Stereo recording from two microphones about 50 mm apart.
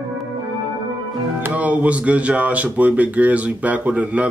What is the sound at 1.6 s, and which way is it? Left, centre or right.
A man's voice, right.